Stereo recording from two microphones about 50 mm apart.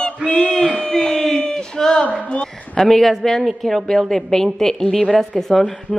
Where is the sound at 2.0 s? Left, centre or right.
Left.